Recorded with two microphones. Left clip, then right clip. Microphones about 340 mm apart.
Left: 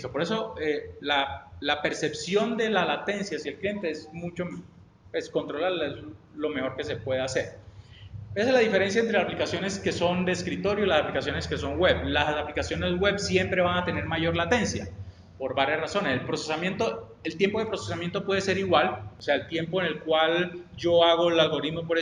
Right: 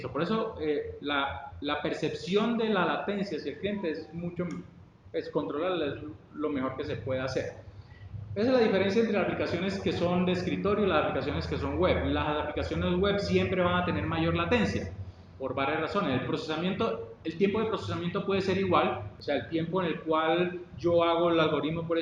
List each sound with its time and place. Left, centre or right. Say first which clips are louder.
0.0 s a man's voice: left 2 dB; left
5.1 s a man's voice: left 2 dB; left